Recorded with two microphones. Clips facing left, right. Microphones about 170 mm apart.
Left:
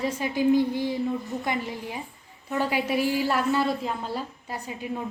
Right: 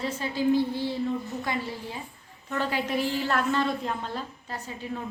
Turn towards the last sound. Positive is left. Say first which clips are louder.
# left 2 dB
turn(degrees=15)  # may be behind; listen again after turning